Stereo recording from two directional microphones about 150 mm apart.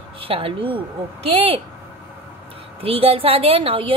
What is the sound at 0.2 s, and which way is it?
Speech, 40° right (ahead or behind).